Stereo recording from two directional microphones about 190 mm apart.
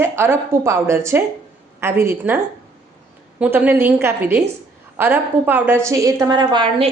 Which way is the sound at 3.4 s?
10° right (ahead or behind).